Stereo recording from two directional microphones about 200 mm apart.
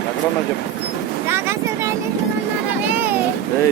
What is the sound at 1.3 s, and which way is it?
Vehicle, 10° right (ahead or behind).